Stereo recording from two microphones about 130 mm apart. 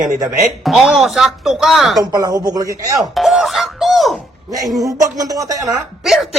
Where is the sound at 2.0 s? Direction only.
30° right (ahead or behind).